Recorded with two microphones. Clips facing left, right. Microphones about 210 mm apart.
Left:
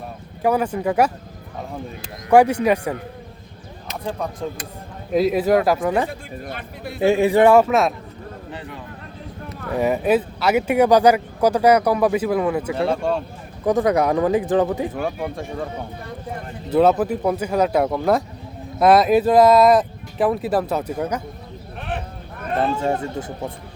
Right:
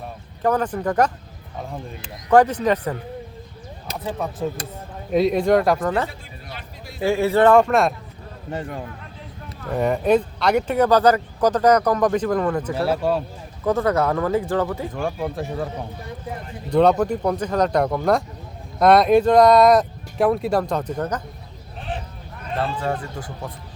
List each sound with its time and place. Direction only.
0.4 s speech: 10° left (ahead or behind)
2.3 s speech: 10° left (ahead or behind)
4.0 s speech: 5° right (ahead or behind); by 6.1 s 10° left (ahead or behind)
6.1 s speech: 55° left (ahead or behind)
7.0 s speech: 20° left (ahead or behind); by 7.9 s centre (ahead or behind)
9.7 s speech: 5° left (ahead or behind)
12.7 s speech: 5° right (ahead or behind)
13.7 s speech: 15° left (ahead or behind)
14.9 s speech: centre (ahead or behind)
21.8 s a sound: 60° left (ahead or behind)
22.8 s speech: 25° left (ahead or behind)